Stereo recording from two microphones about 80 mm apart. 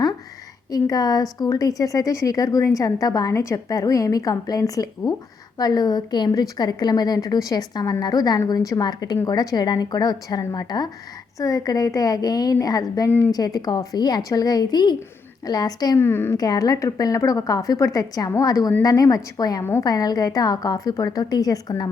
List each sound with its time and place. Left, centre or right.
0.7 s a woman's voice: left
11.3 s a woman's voice: left
16.0 s speech: left
16.4 s a woman's voice: left